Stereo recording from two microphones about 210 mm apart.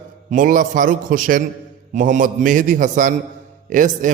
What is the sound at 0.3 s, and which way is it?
A man's voice, 40° right (ahead or behind).